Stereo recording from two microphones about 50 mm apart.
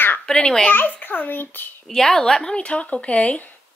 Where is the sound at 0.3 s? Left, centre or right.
Centre.